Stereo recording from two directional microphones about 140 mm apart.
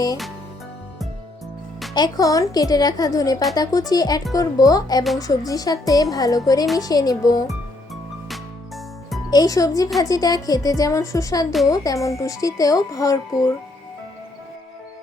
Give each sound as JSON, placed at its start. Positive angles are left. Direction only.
{"t": 2.0, "sound": "speech", "side_deg": 25}
{"t": 8.3, "sound": "music", "side_deg": 0}
{"t": 9.3, "sound": "speech", "side_deg": 25}